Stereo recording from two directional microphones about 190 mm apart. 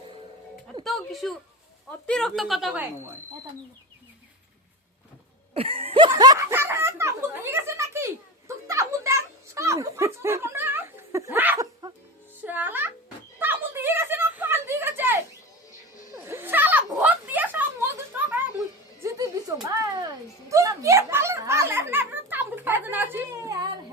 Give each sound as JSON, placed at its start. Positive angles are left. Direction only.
{"t": 0.9, "sound": "a woman's voice", "side_deg": 0}
{"t": 5.5, "sound": "snicker", "side_deg": -30}
{"t": 12.4, "sound": "speech", "side_deg": -10}
{"t": 13.4, "sound": "a sound", "side_deg": -10}
{"t": 18.1, "sound": "children playing", "side_deg": -10}
{"t": 19.0, "sound": "music", "side_deg": -20}
{"t": 19.8, "sound": "a child's voice", "side_deg": -20}